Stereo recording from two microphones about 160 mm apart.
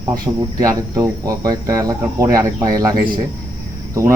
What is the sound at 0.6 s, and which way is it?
Speech, 20° right (ahead or behind).